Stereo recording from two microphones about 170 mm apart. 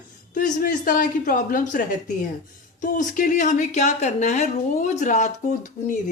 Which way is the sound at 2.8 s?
50° left (ahead or behind).